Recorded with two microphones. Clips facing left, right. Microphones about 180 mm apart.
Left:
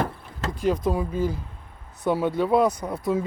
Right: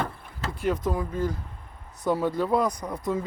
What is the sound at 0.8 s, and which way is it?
Speech, 10° left (ahead or behind).